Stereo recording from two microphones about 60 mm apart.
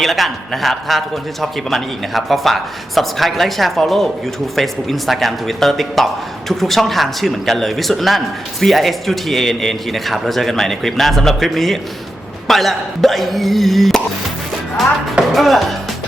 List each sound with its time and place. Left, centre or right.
0.0 s a man's voice: centre
15.3 s a man's voice: centre